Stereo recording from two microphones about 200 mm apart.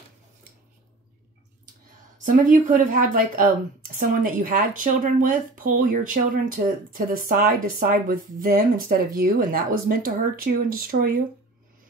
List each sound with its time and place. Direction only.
2.1 s speech: 40° right (ahead or behind)